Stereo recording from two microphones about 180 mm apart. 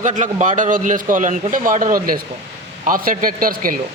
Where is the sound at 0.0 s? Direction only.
40° right (ahead or behind).